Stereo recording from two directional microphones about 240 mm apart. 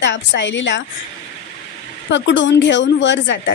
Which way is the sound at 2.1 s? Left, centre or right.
Left.